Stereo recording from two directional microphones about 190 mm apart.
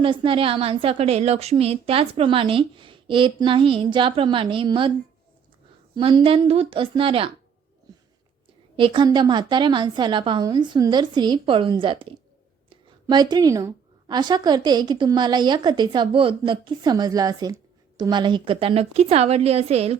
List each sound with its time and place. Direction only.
0.0 s a woman's voice: 25° right (ahead or behind)
5.9 s a woman's voice: 25° right (ahead or behind)
8.7 s a woman's voice: 25° right (ahead or behind)
13.1 s a woman's voice: 20° right (ahead or behind)